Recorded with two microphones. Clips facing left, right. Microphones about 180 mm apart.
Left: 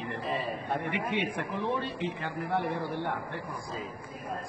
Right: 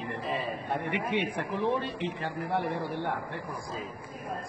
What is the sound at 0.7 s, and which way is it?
Speech, 15° right (ahead or behind).